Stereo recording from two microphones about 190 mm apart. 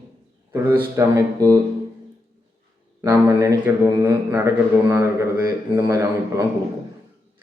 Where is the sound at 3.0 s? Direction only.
15° right (ahead or behind).